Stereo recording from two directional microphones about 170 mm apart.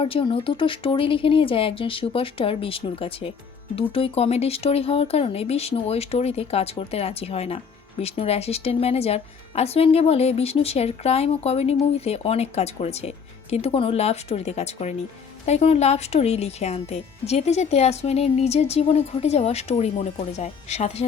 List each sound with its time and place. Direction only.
0.0 s speech: 30° left (ahead or behind)